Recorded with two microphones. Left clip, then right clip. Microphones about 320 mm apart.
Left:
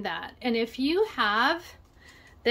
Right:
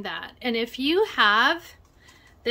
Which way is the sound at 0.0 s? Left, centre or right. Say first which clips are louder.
Right 1 dB; centre.